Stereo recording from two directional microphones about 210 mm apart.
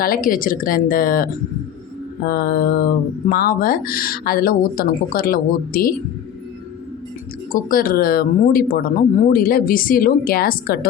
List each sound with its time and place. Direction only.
0.0 s speech: 45° left (ahead or behind)
7.5 s speech: 40° left (ahead or behind)